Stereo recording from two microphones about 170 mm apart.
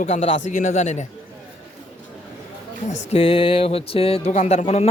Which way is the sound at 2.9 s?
35° left (ahead or behind).